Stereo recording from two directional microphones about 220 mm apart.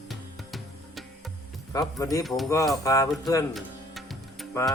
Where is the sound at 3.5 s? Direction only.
Centre (ahead or behind).